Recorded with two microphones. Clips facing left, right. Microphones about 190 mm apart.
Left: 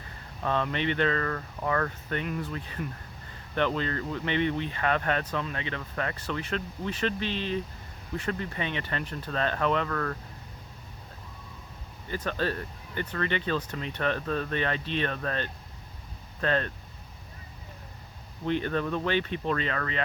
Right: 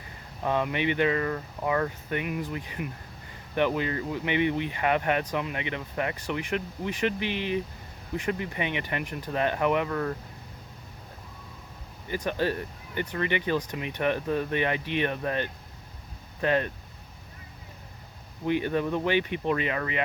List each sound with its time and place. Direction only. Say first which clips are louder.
0.4 s speech: right 2 dB; 15° right (ahead or behind)
12.0 s speech: right 2 dB; 15° right (ahead or behind)
18.4 s speech: right 2 dB; 15° right (ahead or behind)